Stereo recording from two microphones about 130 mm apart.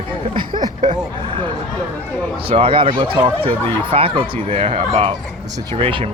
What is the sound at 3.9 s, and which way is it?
Speech, 45° right (ahead or behind).